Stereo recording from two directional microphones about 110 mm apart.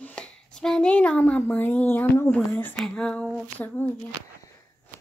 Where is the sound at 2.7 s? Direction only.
5° left (ahead or behind).